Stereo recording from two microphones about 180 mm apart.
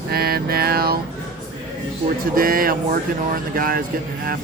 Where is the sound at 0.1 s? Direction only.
55° right (ahead or behind).